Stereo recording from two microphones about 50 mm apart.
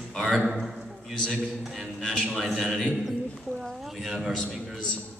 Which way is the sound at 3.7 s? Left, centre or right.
Centre.